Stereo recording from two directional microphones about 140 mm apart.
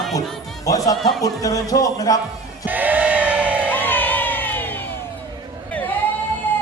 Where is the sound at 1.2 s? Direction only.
25° left (ahead or behind).